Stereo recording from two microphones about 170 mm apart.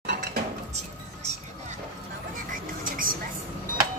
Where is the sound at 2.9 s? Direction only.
55° right (ahead or behind).